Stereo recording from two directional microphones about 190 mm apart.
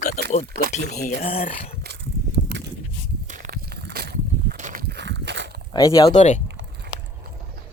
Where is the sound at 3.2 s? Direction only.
45° right (ahead or behind).